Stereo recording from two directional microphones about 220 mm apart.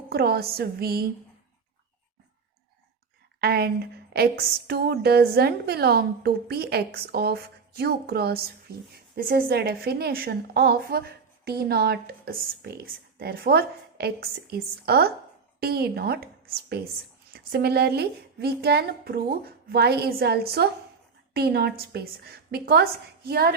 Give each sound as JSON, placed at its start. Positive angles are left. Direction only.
{"t": 0.1, "sound": "a woman's voice", "side_deg": -45}
{"t": 3.4, "sound": "a woman's voice", "side_deg": -45}